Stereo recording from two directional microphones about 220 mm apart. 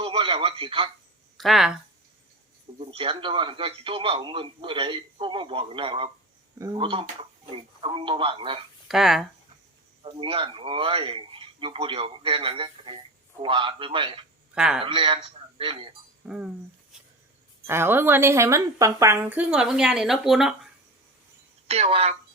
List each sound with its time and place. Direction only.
0.0 s radio: 25° right (ahead or behind)
1.4 s speech: centre (ahead or behind)
2.7 s speech: 25° right (ahead or behind)
8.9 s speech: centre (ahead or behind)
10.0 s speech: 25° right (ahead or behind)
14.5 s a man's voice: 5° right (ahead or behind)
14.8 s speech: 20° right (ahead or behind)
16.2 s speech: 5° right (ahead or behind)
17.7 s a woman's voice: 10° right (ahead or behind)
21.7 s speech: 25° right (ahead or behind)